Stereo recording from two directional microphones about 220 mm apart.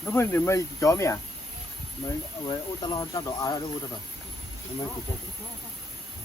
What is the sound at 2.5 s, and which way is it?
Speech, 20° left (ahead or behind).